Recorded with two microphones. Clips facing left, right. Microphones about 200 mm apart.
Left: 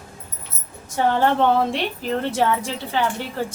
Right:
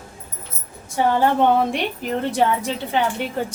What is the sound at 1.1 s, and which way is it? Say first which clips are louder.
A woman's voice: right 1 dB; 15° right (ahead or behind).